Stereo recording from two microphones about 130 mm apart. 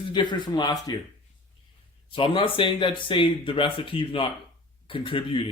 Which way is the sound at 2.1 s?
45° left (ahead or behind).